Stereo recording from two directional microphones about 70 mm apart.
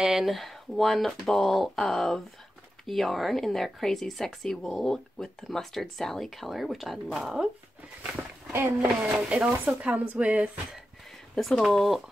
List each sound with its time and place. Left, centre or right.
0.0 s speech: centre
7.4 s speech: centre
8.2 s a sound: right
8.7 s speech: centre
11.3 s speech: centre